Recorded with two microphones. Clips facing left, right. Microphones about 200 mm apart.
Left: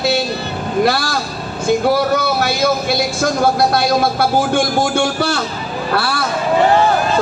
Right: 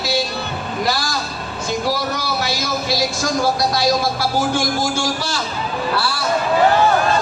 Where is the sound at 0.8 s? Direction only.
60° left (ahead or behind).